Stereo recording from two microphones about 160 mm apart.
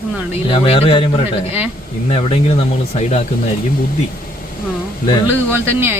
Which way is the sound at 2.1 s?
35° left (ahead or behind).